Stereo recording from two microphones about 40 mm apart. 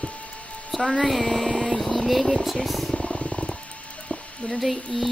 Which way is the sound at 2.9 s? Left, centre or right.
Left.